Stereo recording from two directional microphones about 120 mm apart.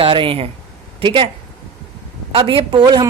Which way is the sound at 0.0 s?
45° right (ahead or behind).